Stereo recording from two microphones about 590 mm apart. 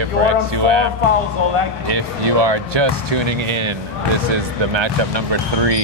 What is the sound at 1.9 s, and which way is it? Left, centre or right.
Speech, right.